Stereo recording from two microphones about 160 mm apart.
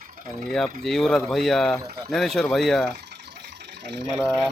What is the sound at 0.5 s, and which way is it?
Speech, centre (ahead or behind).